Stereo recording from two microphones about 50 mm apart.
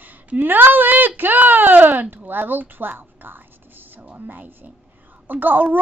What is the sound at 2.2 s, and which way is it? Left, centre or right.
A woman's voice, right.